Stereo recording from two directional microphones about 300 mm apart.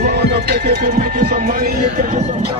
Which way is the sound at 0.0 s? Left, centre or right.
Right.